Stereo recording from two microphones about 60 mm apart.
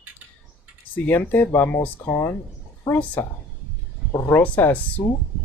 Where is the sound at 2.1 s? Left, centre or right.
Left.